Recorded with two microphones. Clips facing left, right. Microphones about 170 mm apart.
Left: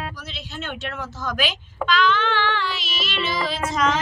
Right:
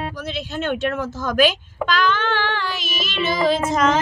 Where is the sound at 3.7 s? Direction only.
50° right (ahead or behind).